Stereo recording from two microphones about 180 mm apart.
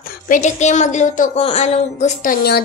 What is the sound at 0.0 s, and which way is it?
A woman's voice, 45° left (ahead or behind).